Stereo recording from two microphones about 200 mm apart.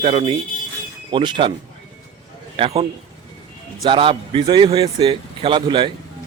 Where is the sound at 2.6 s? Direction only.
30° right (ahead or behind).